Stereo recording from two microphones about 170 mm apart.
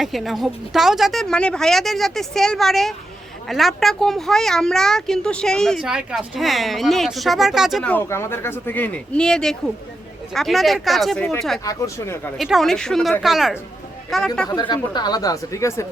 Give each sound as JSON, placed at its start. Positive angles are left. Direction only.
{"t": 0.0, "sound": "speech", "side_deg": 0}
{"t": 11.6, "sound": "speech", "side_deg": 20}
{"t": 12.4, "sound": "speech", "side_deg": 0}
{"t": 14.5, "sound": "speech", "side_deg": 25}